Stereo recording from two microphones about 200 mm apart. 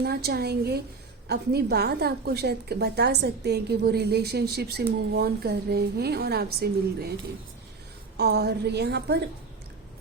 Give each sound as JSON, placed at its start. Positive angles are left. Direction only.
{"t": 0.0, "sound": "a woman's voice", "side_deg": -50}
{"t": 8.1, "sound": "a woman's voice", "side_deg": -55}